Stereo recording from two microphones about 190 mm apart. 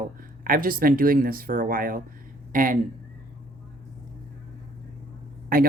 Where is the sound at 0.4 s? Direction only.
50° right (ahead or behind).